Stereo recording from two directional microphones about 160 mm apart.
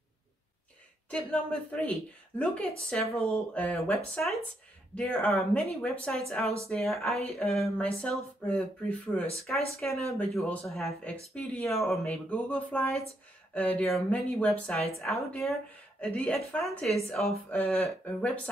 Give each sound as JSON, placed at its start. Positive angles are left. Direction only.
{"t": 1.1, "sound": "speech", "side_deg": 5}